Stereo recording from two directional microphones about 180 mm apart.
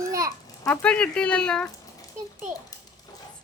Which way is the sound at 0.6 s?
10° left (ahead or behind).